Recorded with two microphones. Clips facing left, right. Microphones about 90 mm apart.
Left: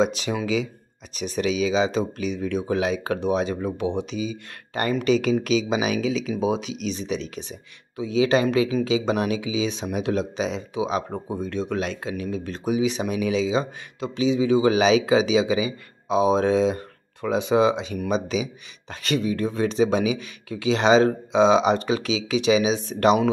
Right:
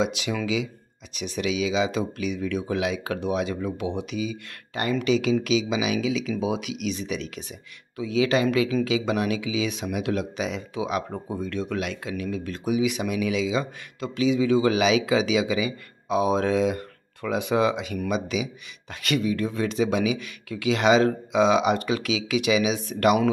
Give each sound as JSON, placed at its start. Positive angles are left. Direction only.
{"t": 0.0, "sound": "speech", "side_deg": 35}
{"t": 4.7, "sound": "speech", "side_deg": 40}
{"t": 14.8, "sound": "speech", "side_deg": 35}